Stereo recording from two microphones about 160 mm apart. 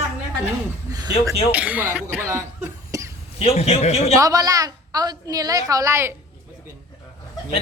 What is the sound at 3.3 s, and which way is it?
Speech, 40° left (ahead or behind).